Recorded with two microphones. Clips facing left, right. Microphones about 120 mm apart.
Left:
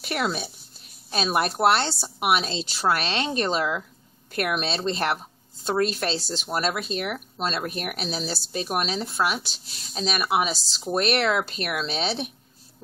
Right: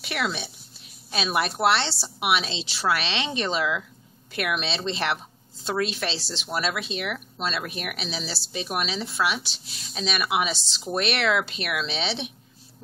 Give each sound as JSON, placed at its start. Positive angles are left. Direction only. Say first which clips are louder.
{"t": 0.0, "sound": "speech", "louder": "left 2 dB", "side_deg": 45}
{"t": 2.0, "sound": "speech", "louder": "left 2 dB", "side_deg": 0}
{"t": 2.3, "sound": "speech", "louder": "left 2 dB", "side_deg": 45}
{"t": 9.4, "sound": "speech", "louder": "right 1 dB", "side_deg": 0}
{"t": 9.9, "sound": "speech", "louder": "left 2 dB", "side_deg": 40}